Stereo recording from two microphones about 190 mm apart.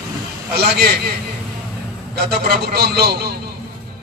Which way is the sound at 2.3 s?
55° right (ahead or behind).